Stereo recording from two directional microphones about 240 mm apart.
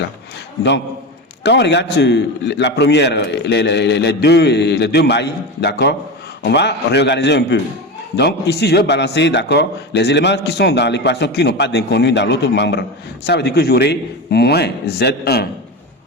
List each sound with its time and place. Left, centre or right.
1.5 s a man's voice: left